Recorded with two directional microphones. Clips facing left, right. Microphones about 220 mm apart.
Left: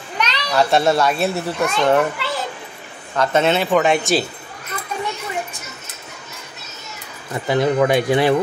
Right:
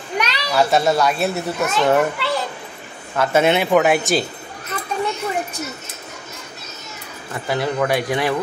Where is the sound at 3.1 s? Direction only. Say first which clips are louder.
Right 1 dB; 10° right (ahead or behind).